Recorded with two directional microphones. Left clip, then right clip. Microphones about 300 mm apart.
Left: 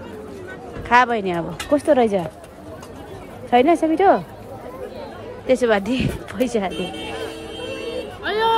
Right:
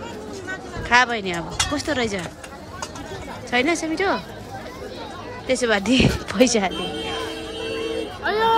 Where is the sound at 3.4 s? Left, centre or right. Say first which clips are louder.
Left 6 dB; centre.